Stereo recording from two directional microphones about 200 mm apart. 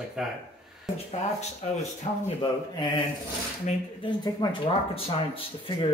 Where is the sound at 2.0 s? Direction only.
35° left (ahead or behind).